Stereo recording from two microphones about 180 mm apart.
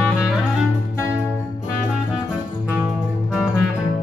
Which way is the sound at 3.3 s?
5° right (ahead or behind).